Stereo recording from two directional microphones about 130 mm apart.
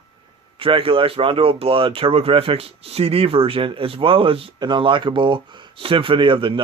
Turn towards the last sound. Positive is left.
turn(degrees=-40)  # may be behind; listen again after turning